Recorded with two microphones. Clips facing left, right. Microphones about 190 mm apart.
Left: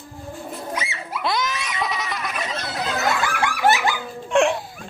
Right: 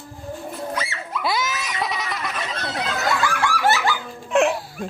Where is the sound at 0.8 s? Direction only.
15° left (ahead or behind).